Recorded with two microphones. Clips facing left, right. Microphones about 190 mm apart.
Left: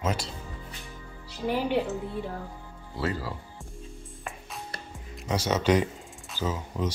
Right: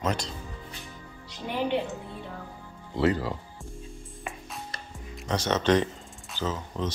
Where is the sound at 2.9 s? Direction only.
20° right (ahead or behind).